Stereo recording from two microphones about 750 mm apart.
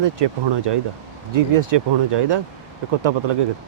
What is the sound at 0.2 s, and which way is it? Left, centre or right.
Speech, right.